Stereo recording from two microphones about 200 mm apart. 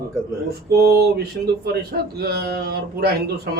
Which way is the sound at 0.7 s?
50° right (ahead or behind).